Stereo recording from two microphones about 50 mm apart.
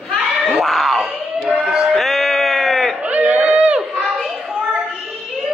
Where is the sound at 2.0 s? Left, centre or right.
Centre.